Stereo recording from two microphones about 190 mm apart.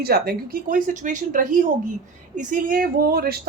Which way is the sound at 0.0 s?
55° right (ahead or behind).